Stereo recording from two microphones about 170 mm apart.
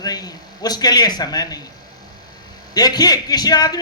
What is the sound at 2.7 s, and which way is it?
A man's voice, 25° left (ahead or behind).